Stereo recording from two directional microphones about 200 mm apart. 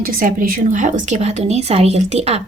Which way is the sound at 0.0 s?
45° right (ahead or behind).